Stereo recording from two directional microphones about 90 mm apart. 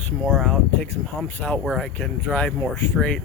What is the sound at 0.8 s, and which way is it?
Speech, 15° left (ahead or behind).